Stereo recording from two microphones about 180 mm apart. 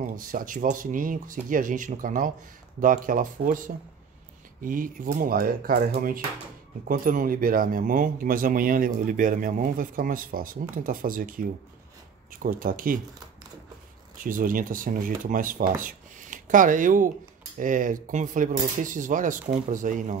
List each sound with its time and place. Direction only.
0.0 s speech: 50° right (ahead or behind)
14.1 s speech: 50° right (ahead or behind)